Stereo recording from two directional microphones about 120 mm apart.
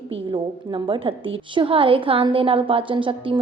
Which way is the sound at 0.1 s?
45° right (ahead or behind).